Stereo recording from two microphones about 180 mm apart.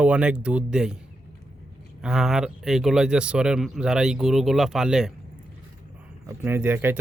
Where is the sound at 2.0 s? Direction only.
Centre (ahead or behind).